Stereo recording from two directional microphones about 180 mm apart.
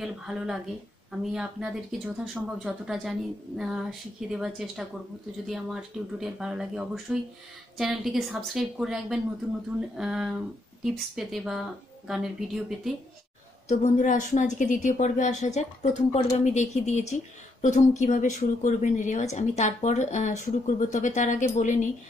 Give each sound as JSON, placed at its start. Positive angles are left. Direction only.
{"t": 0.0, "sound": "speech", "side_deg": 0}
{"t": 13.7, "sound": "a woman's voice", "side_deg": 45}